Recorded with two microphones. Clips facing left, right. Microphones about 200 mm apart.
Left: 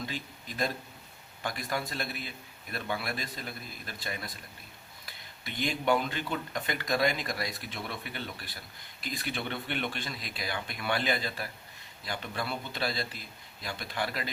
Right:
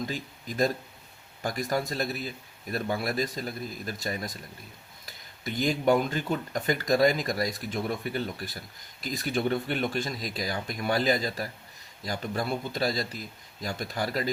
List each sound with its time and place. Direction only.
0.1 s speech: 45° right (ahead or behind)